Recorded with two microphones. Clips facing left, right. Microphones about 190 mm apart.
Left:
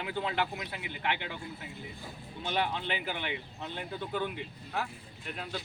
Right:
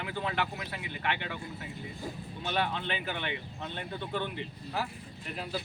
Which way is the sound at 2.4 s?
15° left (ahead or behind).